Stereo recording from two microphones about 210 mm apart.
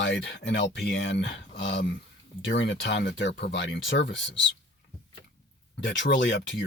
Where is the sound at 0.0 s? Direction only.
55° left (ahead or behind).